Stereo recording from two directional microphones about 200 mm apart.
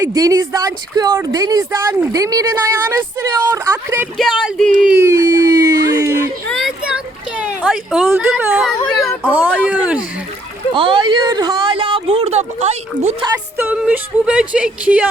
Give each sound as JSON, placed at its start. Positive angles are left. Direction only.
{"t": 0.0, "sound": "a woman's voice", "side_deg": -15}
{"t": 4.2, "sound": "speech", "side_deg": 0}
{"t": 4.8, "sound": "a sound", "side_deg": -5}
{"t": 6.5, "sound": "a sound", "side_deg": 0}
{"t": 9.5, "sound": "speech", "side_deg": 5}
{"t": 9.7, "sound": "a woman's voice", "side_deg": -5}
{"t": 10.8, "sound": "speech", "side_deg": -25}
{"t": 13.2, "sound": "a woman's voice", "side_deg": -15}